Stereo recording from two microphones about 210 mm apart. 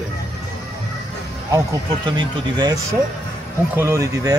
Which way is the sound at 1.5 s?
20° right (ahead or behind).